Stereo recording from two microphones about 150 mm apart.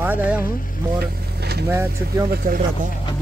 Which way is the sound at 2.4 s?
75° right (ahead or behind).